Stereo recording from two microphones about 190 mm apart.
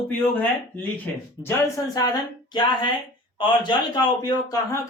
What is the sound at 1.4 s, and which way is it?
Speech, 15° left (ahead or behind).